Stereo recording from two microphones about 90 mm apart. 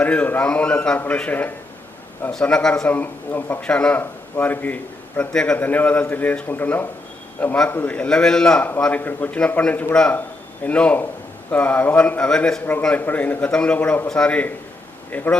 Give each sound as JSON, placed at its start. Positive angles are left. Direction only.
{"t": 0.0, "sound": "a man's voice", "side_deg": 15}
{"t": 2.8, "sound": "a man's voice", "side_deg": 20}
{"t": 9.0, "sound": "a man's voice", "side_deg": 20}
{"t": 12.8, "sound": "a man's voice", "side_deg": 20}